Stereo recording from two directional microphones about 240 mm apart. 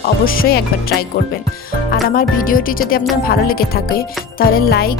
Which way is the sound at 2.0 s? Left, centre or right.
Left.